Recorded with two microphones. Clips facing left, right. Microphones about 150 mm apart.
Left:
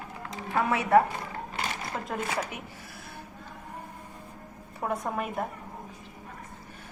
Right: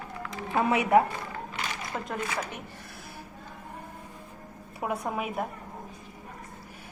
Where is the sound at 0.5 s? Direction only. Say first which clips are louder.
Even; 15° right (ahead or behind).